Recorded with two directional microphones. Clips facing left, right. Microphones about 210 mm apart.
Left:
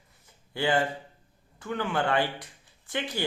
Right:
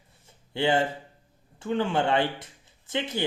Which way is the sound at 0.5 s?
25° right (ahead or behind).